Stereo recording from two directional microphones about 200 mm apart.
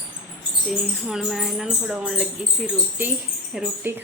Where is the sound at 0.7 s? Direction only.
Centre (ahead or behind).